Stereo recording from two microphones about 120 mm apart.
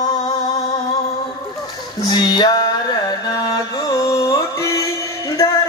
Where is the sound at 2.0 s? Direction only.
35° left (ahead or behind).